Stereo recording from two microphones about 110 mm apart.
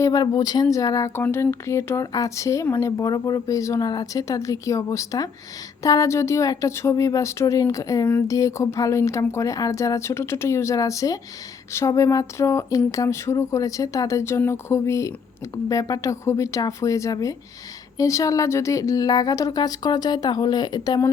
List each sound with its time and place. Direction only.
0.0 s a woman's voice: 35° left (ahead or behind)